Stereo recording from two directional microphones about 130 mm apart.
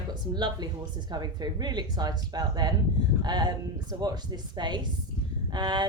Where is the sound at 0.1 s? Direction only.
35° right (ahead or behind).